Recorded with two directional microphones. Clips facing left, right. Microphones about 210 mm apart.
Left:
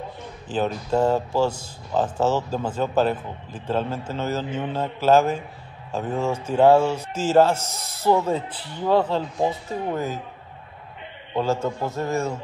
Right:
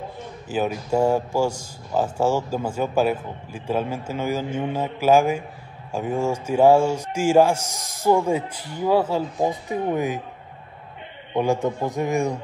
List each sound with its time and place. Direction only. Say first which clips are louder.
0.5 s speech: even; 10° right (ahead or behind)
11.3 s speech: right 2 dB; 15° right (ahead or behind)